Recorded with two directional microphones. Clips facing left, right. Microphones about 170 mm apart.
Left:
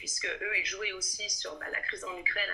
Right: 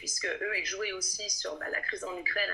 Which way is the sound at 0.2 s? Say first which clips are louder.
Right 3 dB; 40° right (ahead or behind).